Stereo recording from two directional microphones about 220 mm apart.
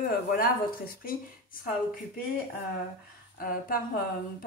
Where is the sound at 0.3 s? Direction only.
45° left (ahead or behind).